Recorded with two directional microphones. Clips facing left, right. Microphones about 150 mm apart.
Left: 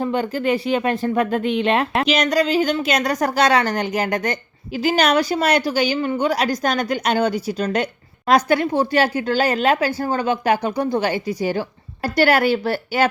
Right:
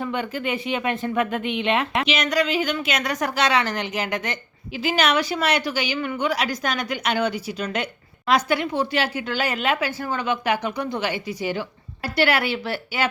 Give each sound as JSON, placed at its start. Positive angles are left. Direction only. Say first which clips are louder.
{"t": 0.0, "sound": "a woman's voice", "louder": "left 6 dB", "side_deg": 35}